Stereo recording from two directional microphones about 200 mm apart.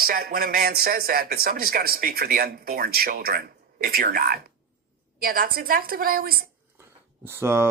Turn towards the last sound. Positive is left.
turn(degrees=-10)  # may be behind; listen again after turning